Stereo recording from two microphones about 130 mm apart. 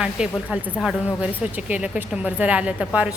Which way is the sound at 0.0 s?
5° right (ahead or behind).